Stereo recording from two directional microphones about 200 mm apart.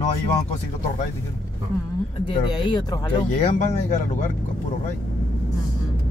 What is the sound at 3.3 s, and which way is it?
Speech, 35° left (ahead or behind).